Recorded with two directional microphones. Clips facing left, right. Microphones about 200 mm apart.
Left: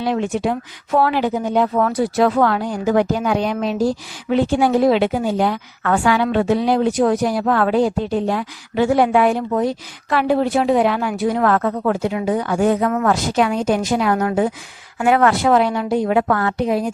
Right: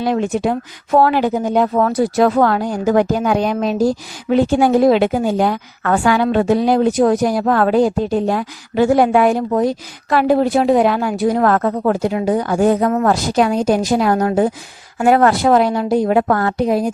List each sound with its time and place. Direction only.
0.0 s a woman's voice: 45° right (ahead or behind)